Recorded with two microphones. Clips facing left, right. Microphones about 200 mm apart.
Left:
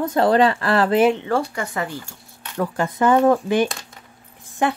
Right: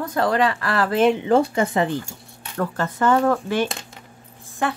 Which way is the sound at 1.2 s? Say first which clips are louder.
Right 5 dB; 20° right (ahead or behind).